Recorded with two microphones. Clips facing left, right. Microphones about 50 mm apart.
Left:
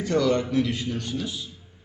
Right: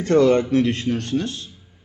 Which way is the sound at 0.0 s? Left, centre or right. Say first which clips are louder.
Right 7 dB; right.